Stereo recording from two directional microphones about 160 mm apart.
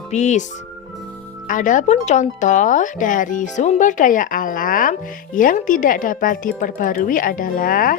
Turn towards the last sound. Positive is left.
turn(degrees=60)  # may be behind; listen again after turning